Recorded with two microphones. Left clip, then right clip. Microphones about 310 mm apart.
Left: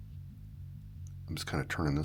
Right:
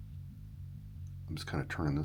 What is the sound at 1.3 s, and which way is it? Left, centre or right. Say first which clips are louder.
Speech: left 3 dB; centre.